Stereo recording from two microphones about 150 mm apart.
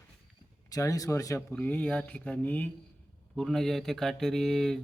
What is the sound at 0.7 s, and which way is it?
Speech, 25° left (ahead or behind).